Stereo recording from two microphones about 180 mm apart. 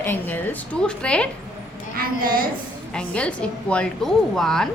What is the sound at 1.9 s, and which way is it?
Speech, 55° right (ahead or behind).